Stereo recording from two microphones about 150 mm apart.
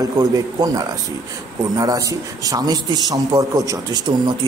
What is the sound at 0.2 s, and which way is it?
A man's voice, 25° right (ahead or behind).